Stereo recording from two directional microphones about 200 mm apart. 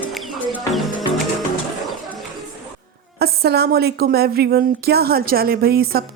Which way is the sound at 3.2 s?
50° right (ahead or behind).